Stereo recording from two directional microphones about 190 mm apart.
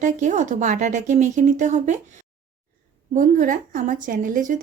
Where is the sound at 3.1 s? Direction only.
45° right (ahead or behind).